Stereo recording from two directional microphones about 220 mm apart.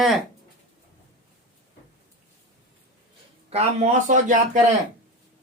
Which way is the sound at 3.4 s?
30° right (ahead or behind).